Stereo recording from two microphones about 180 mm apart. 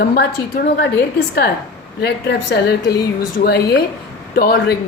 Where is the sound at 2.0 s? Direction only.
70° left (ahead or behind).